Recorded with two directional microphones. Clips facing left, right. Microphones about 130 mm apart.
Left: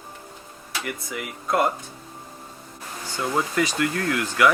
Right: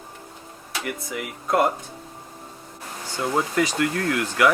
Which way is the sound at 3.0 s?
40° right (ahead or behind).